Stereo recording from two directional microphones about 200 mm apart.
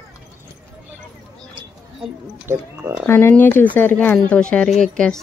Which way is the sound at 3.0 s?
10° left (ahead or behind).